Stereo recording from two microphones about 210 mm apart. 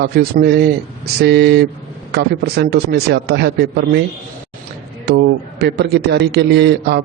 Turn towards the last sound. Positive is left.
turn(degrees=-50)  # may be behind; listen again after turning